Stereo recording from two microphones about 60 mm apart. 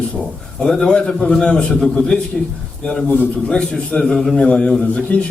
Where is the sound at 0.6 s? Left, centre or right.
Centre.